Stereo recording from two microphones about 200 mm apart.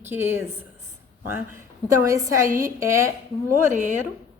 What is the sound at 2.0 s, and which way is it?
A woman's voice, 15° right (ahead or behind).